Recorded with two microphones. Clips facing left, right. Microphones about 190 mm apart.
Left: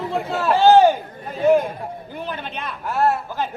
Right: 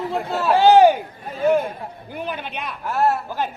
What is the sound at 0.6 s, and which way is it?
Speech, 15° right (ahead or behind).